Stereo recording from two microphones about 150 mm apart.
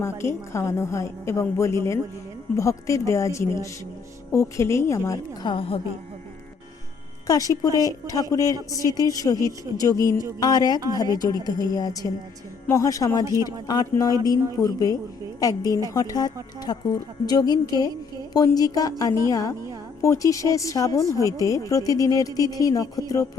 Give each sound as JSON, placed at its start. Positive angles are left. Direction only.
{"t": 0.0, "sound": "speech", "side_deg": 20}
{"t": 7.3, "sound": "speech", "side_deg": 25}